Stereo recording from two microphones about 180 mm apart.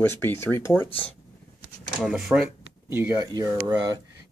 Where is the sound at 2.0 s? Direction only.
5° right (ahead or behind).